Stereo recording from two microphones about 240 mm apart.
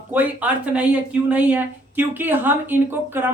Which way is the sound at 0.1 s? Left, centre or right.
Centre.